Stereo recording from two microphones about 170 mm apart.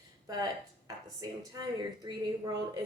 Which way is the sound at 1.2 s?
20° right (ahead or behind).